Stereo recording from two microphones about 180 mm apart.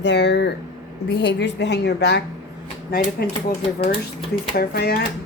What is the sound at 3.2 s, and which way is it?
Speech, 60° left (ahead or behind).